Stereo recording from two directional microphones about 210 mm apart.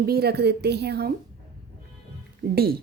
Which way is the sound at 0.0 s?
50° right (ahead or behind).